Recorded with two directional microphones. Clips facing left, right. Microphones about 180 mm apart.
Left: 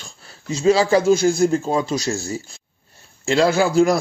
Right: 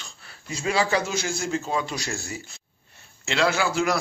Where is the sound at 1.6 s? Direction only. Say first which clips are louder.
Left 7 dB; 40° left (ahead or behind).